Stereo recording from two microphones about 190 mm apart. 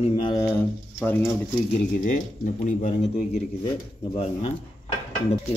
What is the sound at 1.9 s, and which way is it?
Speech, 45° left (ahead or behind).